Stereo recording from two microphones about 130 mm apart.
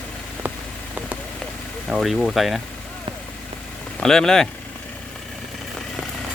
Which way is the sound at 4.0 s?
5° left (ahead or behind).